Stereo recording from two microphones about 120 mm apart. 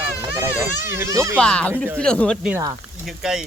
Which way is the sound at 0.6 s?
20° right (ahead or behind).